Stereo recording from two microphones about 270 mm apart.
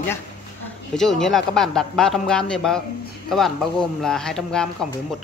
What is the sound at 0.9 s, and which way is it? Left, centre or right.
A man's voice, centre.